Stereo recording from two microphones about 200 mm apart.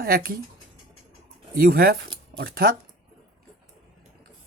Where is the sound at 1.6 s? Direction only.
50° right (ahead or behind).